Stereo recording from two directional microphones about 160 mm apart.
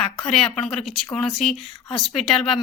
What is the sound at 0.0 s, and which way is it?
Speech, 35° left (ahead or behind).